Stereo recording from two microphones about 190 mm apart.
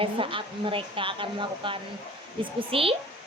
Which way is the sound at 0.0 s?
25° right (ahead or behind).